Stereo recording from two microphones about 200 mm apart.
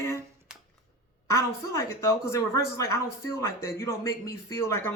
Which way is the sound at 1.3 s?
15° left (ahead or behind).